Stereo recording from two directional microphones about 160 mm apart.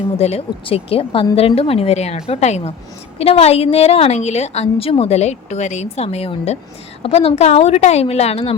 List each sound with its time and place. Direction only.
0.2 s a woman's voice: 40° left (ahead or behind)